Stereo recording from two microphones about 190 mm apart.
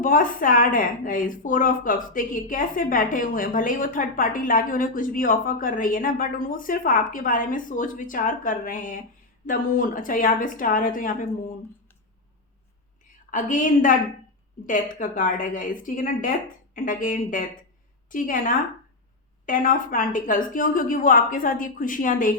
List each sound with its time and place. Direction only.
0.0 s a woman's voice: 45° left (ahead or behind)
13.3 s a woman's voice: 40° left (ahead or behind)